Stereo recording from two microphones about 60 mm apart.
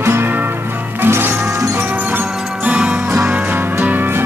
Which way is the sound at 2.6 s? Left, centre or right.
Right.